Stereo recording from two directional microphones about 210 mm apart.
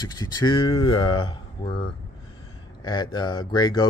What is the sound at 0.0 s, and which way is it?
Speech, 20° left (ahead or behind).